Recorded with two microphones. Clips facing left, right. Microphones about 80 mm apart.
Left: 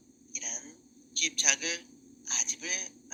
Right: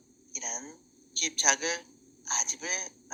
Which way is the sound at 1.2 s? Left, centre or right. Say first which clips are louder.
Right 5 dB; right.